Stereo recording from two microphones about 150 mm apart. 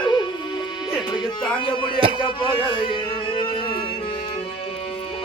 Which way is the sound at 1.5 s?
35° left (ahead or behind).